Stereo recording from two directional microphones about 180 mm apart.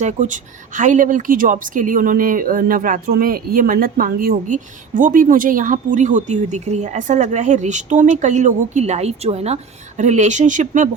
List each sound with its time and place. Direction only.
0.0 s speech: 45° right (ahead or behind)